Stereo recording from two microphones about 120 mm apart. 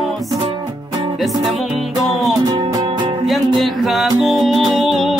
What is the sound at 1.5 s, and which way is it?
Music, centre (ahead or behind).